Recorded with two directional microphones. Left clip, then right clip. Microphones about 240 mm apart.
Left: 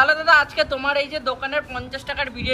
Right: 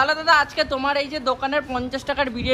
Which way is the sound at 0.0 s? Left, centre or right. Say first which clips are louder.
Left 2 dB; centre.